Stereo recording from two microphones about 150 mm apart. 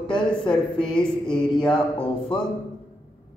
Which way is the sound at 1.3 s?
30° left (ahead or behind).